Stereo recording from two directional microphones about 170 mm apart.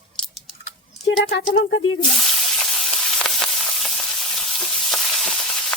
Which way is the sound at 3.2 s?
5° left (ahead or behind).